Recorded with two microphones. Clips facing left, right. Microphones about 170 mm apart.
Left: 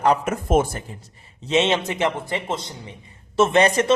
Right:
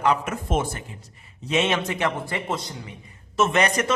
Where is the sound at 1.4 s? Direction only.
25° left (ahead or behind).